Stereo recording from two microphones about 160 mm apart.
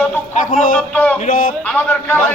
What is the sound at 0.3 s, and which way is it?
A man's voice, 55° left (ahead or behind).